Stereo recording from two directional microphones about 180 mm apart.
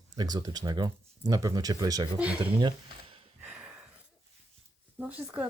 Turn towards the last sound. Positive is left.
turn(degrees=-5)  # may be behind; listen again after turning